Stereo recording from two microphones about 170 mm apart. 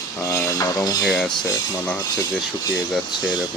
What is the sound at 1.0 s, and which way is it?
Speech, centre (ahead or behind).